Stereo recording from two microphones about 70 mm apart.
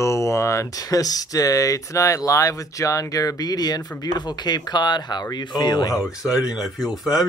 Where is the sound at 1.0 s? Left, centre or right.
Left.